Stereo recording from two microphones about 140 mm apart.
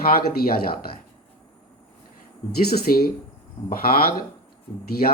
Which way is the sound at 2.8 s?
90° left.